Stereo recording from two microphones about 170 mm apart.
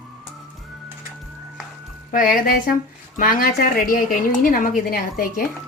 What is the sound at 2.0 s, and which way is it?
A woman's voice, 55° left (ahead or behind).